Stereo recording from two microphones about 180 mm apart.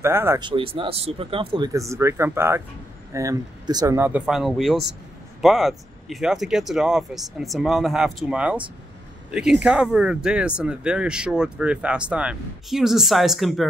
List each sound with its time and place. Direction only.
0.0 s speech: 15° right (ahead or behind)
0.4 s speech: 25° right (ahead or behind)
1.7 s speech: 15° right (ahead or behind)
4.3 s speech: centre (ahead or behind)